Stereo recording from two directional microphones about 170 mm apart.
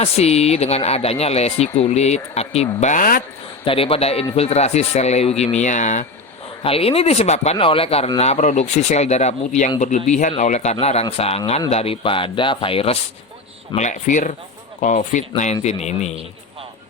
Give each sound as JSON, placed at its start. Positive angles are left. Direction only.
{"t": 0.0, "sound": "speech", "side_deg": 35}
{"t": 2.8, "sound": "speech", "side_deg": 50}
{"t": 3.6, "sound": "speech", "side_deg": 30}
{"t": 6.6, "sound": "speech", "side_deg": 35}
{"t": 13.7, "sound": "speech", "side_deg": 45}